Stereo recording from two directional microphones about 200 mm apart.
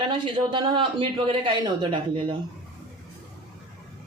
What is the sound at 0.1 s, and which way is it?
Speech, 25° right (ahead or behind).